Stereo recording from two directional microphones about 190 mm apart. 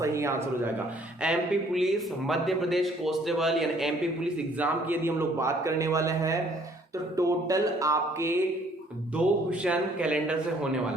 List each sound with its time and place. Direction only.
0.0 s speech: 15° right (ahead or behind)
1.2 s a man's voice: 5° right (ahead or behind)